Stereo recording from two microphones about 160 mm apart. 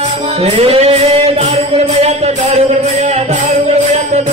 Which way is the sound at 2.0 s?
45° right (ahead or behind).